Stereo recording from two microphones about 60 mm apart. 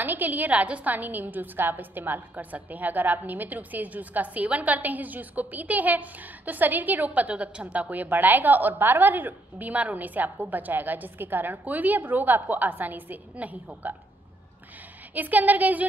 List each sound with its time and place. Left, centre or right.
0.0 s a woman's voice: right
15.1 s a woman's voice: right